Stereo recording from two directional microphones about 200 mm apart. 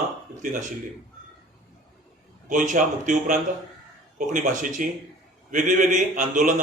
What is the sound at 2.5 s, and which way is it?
A man's voice, 40° right (ahead or behind).